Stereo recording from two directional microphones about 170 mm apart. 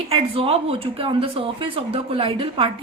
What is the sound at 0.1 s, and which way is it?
A woman's voice, 35° right (ahead or behind).